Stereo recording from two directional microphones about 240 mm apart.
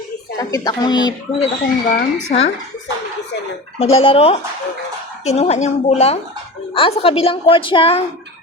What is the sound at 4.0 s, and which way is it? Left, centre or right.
A woman's voice, left.